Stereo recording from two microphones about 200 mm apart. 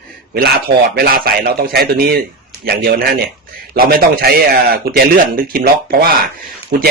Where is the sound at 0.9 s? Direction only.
50° right (ahead or behind).